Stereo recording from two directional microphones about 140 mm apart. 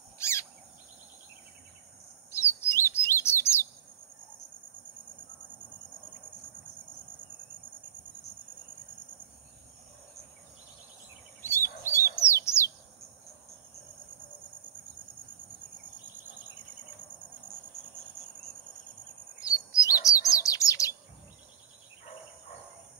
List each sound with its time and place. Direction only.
0.2 s bird vocalization: 20° left (ahead or behind)
2.3 s chirp: 20° left (ahead or behind)
11.4 s bird: 15° left (ahead or behind)
19.4 s chirp: 25° left (ahead or behind)